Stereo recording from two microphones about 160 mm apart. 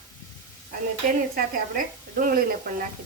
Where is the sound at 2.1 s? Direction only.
60° right (ahead or behind).